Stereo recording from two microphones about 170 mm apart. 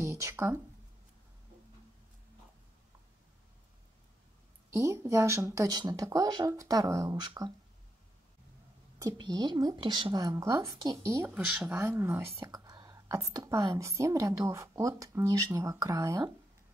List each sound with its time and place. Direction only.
0.0 s speech: 15° right (ahead or behind)
4.7 s speech: 15° right (ahead or behind)
9.0 s speech: 25° right (ahead or behind)
11.3 s speech: 5° right (ahead or behind)